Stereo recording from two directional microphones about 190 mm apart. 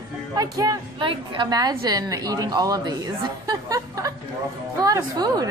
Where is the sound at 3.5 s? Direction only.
20° right (ahead or behind).